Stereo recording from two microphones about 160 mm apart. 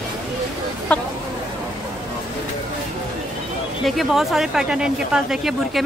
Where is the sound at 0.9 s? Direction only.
10° left (ahead or behind).